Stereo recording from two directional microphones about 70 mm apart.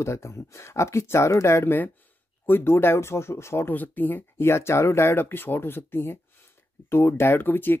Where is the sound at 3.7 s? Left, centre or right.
Left.